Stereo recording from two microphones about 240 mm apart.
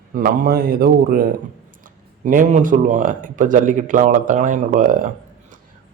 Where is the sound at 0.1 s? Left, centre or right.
Right.